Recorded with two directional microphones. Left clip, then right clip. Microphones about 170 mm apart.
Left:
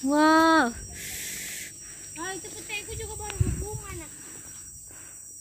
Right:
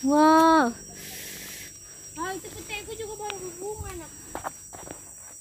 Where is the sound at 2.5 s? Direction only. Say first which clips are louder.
Even; 70° right (ahead or behind).